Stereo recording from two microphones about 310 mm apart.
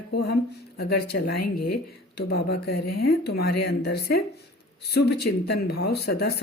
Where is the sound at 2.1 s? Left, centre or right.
Left.